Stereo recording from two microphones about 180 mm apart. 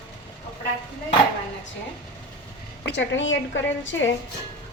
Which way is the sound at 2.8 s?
85° left.